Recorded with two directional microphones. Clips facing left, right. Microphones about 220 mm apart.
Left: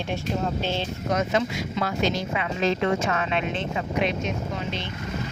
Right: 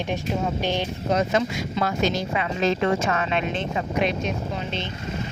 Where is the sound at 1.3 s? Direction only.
45° right (ahead or behind).